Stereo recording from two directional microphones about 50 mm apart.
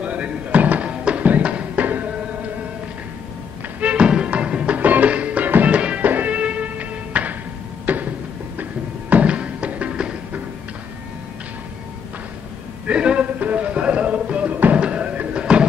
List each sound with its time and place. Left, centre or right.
0.0 s music: right
3.8 s music: right
4.7 s music: right
7.8 s a sound: right
9.1 s music: right
12.8 s a sound: right
13.4 s music: right